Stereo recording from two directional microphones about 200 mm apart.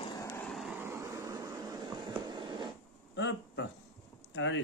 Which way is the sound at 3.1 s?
65° left (ahead or behind).